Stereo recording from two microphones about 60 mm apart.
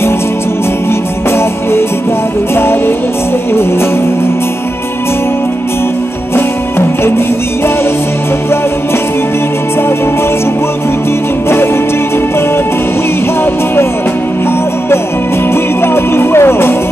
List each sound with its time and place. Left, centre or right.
2.5 s music: left
11.4 s music: left
15.5 s music: left